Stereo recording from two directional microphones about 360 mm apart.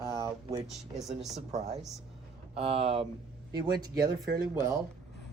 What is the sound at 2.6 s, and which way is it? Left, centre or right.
Speech, centre.